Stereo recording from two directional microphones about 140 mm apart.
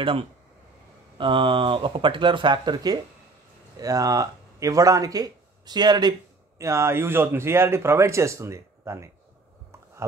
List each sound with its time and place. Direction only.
1.1 s speech: 35° right (ahead or behind)
6.6 s speech: 20° right (ahead or behind)